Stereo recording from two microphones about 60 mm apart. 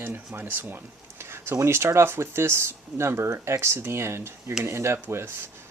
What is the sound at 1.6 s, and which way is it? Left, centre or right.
Speech, right.